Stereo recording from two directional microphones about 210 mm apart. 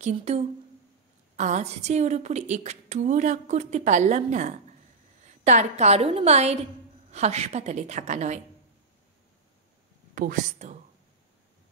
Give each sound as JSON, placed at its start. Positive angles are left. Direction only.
{"t": 0.0, "sound": "a woman's voice", "side_deg": -30}
{"t": 10.1, "sound": "a woman's voice", "side_deg": -40}